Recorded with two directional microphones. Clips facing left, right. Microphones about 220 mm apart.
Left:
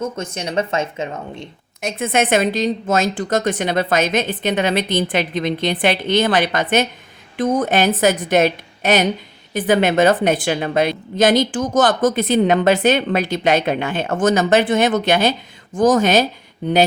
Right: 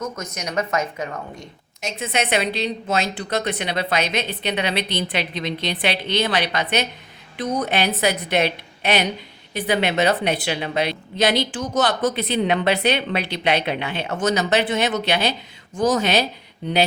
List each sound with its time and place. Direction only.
0.0 s speech: 30° left (ahead or behind)
1.8 s a woman's voice: 50° left (ahead or behind)